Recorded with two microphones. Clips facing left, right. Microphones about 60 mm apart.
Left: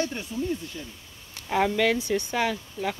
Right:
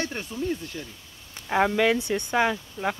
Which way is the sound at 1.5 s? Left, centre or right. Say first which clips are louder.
Right 1 dB; right.